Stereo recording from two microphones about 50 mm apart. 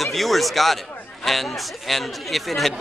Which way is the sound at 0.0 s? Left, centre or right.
Centre.